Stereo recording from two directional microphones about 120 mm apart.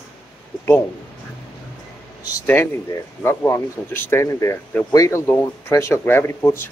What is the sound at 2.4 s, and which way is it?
Speech, 20° left (ahead or behind).